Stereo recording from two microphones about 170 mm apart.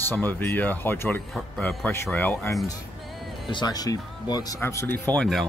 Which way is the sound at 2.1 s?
10° left (ahead or behind).